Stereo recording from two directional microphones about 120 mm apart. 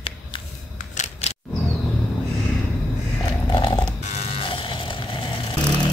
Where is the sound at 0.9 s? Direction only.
70° left (ahead or behind).